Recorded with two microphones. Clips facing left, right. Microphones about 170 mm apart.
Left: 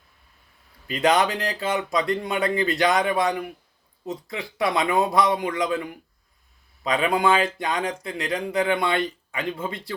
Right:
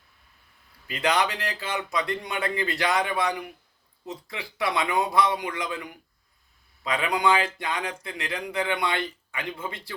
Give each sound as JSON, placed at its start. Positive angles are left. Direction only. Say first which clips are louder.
{"t": 0.9, "sound": "speech", "louder": "left 5 dB", "side_deg": 25}